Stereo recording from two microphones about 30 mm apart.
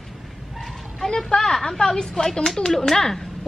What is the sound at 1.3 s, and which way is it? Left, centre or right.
Speech, left.